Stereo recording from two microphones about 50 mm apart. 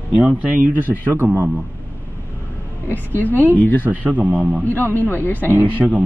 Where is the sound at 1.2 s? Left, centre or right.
Right.